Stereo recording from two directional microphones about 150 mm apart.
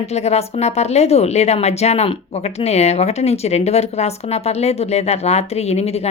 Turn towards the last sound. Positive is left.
turn(degrees=45)  # may be behind; listen again after turning